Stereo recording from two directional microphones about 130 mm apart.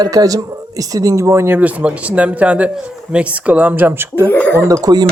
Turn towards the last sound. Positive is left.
turn(degrees=-30)  # may be behind; listen again after turning